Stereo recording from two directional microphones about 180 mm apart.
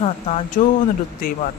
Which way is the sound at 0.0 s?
35° left (ahead or behind).